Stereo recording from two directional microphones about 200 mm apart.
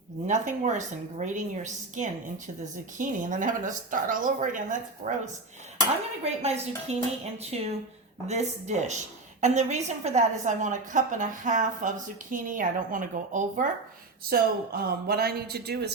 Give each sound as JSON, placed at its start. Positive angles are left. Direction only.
{"t": 0.3, "sound": "a woman's voice", "side_deg": -35}